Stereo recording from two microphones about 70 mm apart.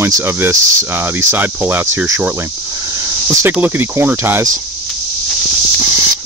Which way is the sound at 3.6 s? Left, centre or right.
Right.